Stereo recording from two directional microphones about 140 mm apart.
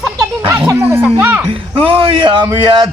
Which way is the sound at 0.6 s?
15° right (ahead or behind).